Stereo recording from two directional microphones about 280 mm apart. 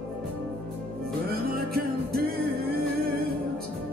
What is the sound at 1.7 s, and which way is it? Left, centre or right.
Music, right.